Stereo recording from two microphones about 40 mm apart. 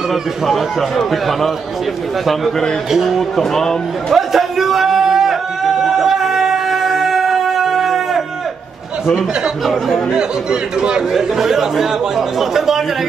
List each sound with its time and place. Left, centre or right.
0.1 s speech: centre
2.9 s speech: centre
3.2 s speech: centre
4.1 s a sound: centre
10.1 s speech: right
11.1 s speech: centre